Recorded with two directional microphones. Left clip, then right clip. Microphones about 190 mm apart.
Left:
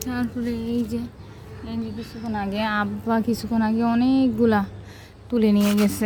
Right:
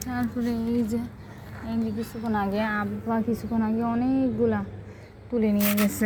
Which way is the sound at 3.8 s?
60° left (ahead or behind).